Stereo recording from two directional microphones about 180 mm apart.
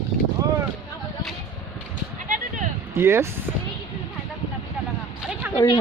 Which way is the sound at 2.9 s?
15° right (ahead or behind).